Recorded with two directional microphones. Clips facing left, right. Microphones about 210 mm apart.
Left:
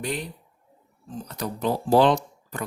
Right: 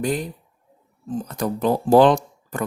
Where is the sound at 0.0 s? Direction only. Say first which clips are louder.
Right 6 dB; 45° right (ahead or behind).